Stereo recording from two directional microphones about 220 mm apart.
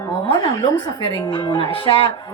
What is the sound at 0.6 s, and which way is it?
A woman's voice, 20° left (ahead or behind).